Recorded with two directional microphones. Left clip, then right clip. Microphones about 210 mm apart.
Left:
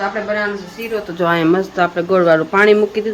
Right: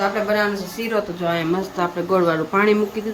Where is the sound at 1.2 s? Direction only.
20° left (ahead or behind).